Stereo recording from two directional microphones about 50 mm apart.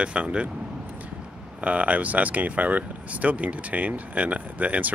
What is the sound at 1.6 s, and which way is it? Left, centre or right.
Speech, right.